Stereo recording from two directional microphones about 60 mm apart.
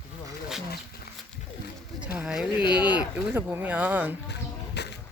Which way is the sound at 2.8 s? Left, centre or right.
Right.